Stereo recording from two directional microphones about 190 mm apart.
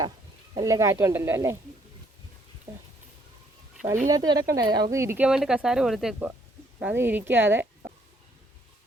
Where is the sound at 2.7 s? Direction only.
20° right (ahead or behind).